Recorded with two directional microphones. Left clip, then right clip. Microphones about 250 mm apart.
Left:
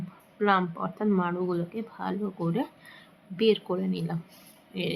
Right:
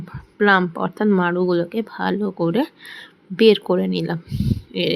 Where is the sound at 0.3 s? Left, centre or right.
Right.